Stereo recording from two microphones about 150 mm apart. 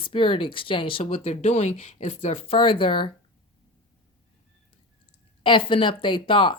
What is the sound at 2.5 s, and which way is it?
Speech, 35° left (ahead or behind).